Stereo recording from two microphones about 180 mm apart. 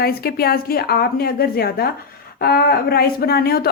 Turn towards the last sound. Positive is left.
turn(degrees=60)  # may be behind; listen again after turning